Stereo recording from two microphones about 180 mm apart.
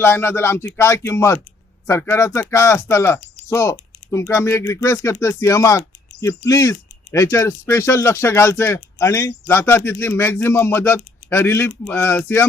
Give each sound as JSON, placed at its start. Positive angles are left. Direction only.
{"t": 0.0, "sound": "speech", "side_deg": 15}